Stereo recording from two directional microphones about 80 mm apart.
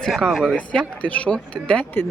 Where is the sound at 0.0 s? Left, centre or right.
Centre.